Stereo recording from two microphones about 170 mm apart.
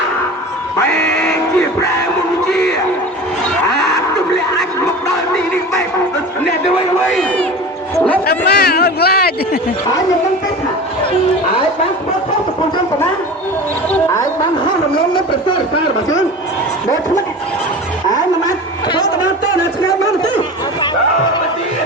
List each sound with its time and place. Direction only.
0.9 s music: 5° left (ahead or behind)
8.3 s a man's voice: 65° left (ahead or behind)
13.9 s speech: 15° left (ahead or behind)